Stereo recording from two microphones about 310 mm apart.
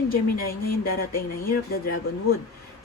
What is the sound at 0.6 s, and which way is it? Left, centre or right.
Speech, left.